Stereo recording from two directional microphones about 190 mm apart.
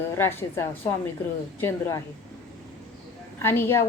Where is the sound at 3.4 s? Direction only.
10° left (ahead or behind).